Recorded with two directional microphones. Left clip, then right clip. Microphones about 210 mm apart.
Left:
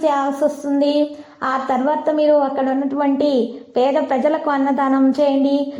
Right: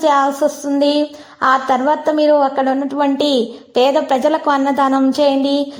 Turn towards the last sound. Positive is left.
turn(degrees=-25)  # may be behind; listen again after turning